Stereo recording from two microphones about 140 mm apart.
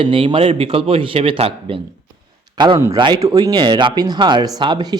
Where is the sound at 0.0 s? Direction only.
35° right (ahead or behind).